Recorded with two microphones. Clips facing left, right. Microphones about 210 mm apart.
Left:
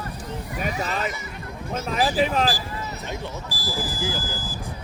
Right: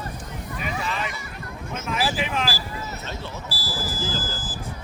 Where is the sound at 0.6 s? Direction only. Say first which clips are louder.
Left 2 dB; 40° left (ahead or behind).